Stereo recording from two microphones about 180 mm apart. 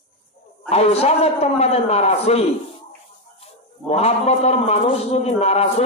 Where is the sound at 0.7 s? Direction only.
35° left (ahead or behind).